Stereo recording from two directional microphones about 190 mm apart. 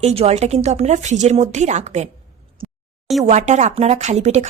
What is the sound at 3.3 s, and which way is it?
Speech, 35° right (ahead or behind).